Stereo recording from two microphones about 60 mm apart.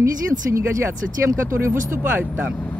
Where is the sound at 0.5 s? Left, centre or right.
Right.